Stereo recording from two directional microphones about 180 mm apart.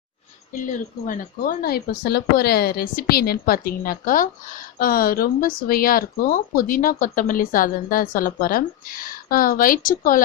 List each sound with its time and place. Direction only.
0.7 s a woman's voice: 50° left (ahead or behind)